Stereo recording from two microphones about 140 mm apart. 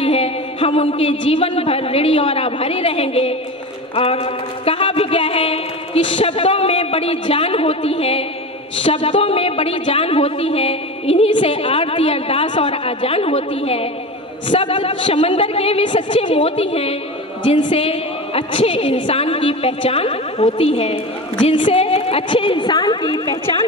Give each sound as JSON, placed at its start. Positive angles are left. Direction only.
{"t": 0.0, "sound": "a woman's voice", "side_deg": 45}